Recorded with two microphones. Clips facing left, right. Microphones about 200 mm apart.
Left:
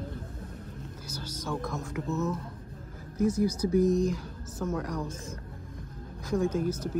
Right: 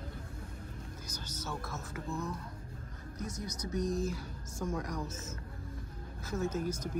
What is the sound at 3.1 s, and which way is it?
Speech, 30° left (ahead or behind).